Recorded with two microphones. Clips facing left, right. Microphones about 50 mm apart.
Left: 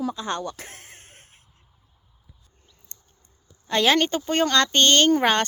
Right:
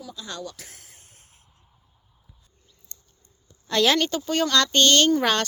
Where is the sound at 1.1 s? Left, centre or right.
Left.